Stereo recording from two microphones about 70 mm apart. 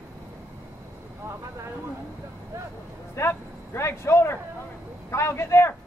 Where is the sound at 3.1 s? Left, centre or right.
Left.